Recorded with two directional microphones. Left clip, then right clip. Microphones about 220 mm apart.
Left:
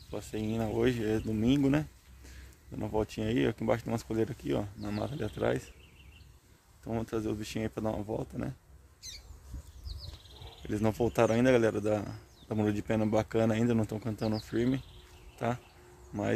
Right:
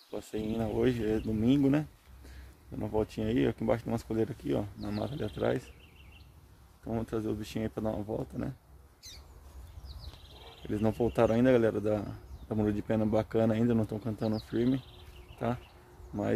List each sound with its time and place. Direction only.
0.1 s speech: 10° left (ahead or behind)
6.8 s speech: 10° left (ahead or behind)
9.0 s squawk: 20° right (ahead or behind)
10.7 s speech: 10° left (ahead or behind)